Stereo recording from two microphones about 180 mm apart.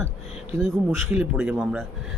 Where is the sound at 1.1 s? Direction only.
5° right (ahead or behind).